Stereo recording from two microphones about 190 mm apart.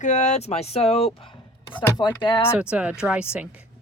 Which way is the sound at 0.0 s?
40° left (ahead or behind).